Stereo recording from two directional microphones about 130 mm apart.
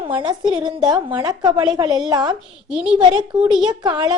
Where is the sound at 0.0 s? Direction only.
40° right (ahead or behind).